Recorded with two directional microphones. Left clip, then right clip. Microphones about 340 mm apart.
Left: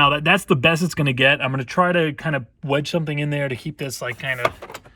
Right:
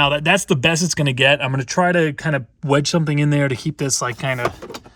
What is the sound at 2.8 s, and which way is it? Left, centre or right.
Speech, centre.